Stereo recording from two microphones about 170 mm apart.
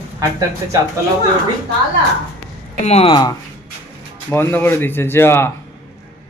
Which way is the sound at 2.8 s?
40° left (ahead or behind).